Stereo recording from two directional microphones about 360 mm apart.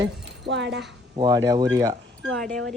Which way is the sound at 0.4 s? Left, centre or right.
Right.